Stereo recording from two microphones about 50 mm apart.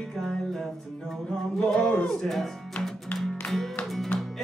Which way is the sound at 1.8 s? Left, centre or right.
Centre.